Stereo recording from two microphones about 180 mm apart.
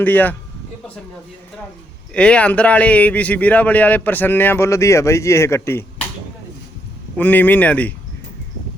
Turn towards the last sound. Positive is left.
turn(degrees=10)  # may be behind; listen again after turning